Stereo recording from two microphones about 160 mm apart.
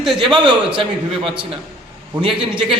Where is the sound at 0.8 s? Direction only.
30° right (ahead or behind).